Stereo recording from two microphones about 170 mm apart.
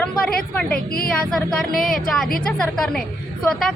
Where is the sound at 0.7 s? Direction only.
60° left (ahead or behind).